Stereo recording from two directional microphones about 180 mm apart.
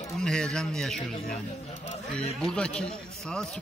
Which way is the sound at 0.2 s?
5° left (ahead or behind).